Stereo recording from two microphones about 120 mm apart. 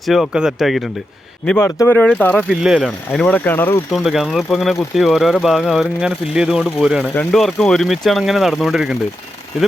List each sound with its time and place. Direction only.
0.0 s speech: centre (ahead or behind)
1.5 s speech: 20° left (ahead or behind)
2.0 s speech: 10° left (ahead or behind)
2.5 s speech: 5° right (ahead or behind)
3.1 s speech: 5° left (ahead or behind)
3.9 s speech: centre (ahead or behind)
7.0 s speech: 10° left (ahead or behind)